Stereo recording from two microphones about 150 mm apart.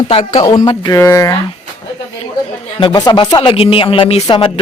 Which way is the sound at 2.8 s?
30° left (ahead or behind).